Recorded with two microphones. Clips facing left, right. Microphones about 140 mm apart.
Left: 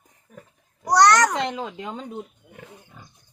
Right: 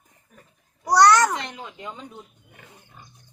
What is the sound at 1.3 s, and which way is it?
Speech, 90° left.